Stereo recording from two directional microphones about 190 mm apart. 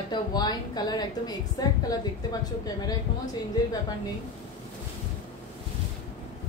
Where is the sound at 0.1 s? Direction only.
20° left (ahead or behind).